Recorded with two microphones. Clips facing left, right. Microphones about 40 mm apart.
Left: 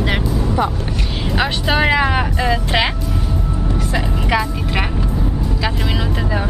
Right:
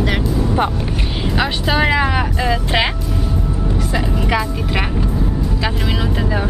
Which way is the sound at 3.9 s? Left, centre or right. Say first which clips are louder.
Even; centre.